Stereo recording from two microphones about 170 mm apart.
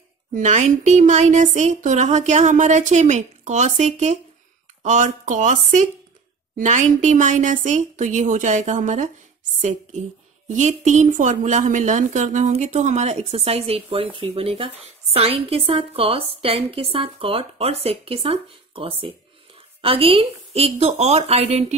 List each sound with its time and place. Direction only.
0.3 s a woman's voice: 45° right (ahead or behind)